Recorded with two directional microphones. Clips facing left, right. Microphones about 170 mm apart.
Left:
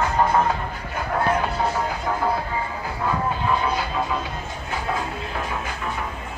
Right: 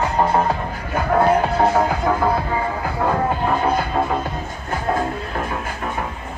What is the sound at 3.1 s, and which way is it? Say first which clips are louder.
Music: right 3 dB; 50° right (ahead or behind).